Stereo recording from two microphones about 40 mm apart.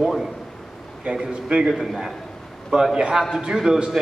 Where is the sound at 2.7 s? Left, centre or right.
Centre.